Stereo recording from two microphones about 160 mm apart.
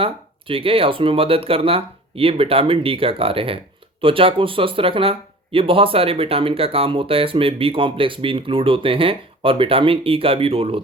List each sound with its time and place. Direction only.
0.0 s speech: 35° right (ahead or behind)